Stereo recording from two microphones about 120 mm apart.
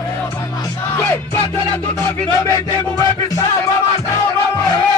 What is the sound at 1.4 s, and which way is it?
Speech, 30° left (ahead or behind).